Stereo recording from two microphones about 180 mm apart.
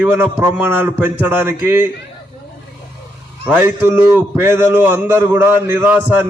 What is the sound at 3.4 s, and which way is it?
A man's voice, 10° right (ahead or behind).